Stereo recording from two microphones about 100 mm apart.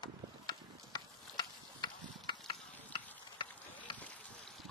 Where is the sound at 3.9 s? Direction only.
50° left (ahead or behind).